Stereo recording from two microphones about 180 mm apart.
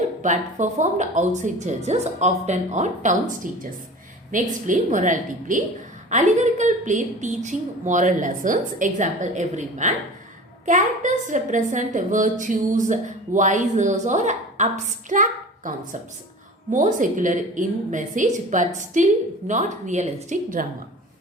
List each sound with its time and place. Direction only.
0.2 s a woman's voice: 45° right (ahead or behind)